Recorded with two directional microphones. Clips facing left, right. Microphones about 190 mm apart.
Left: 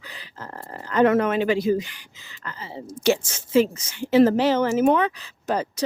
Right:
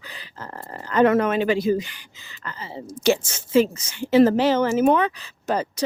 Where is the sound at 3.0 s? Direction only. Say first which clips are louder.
Right 1 dB; 25° right (ahead or behind).